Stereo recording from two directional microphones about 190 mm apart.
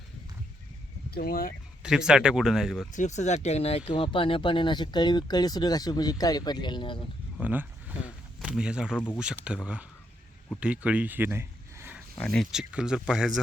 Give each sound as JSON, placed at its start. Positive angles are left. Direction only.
{"t": 1.1, "sound": "speech", "side_deg": 50}
{"t": 1.8, "sound": "speech", "side_deg": -5}
{"t": 2.9, "sound": "speech", "side_deg": 40}
{"t": 7.3, "sound": "speech", "side_deg": -10}
{"t": 12.1, "sound": "speech", "side_deg": 5}